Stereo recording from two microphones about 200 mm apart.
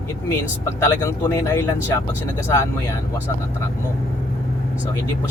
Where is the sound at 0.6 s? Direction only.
20° left (ahead or behind).